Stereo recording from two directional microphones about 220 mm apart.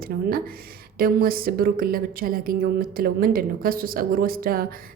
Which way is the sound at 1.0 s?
40° right (ahead or behind).